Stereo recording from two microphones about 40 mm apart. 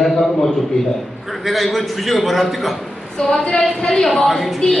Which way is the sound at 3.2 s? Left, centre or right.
Centre.